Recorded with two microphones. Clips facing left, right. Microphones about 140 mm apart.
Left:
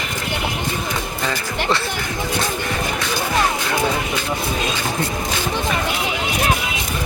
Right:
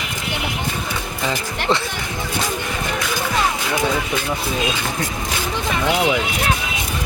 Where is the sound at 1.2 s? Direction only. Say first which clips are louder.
Right 2 dB; 20° right (ahead or behind).